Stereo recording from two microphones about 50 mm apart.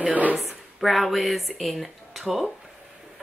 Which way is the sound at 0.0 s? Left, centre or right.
Right.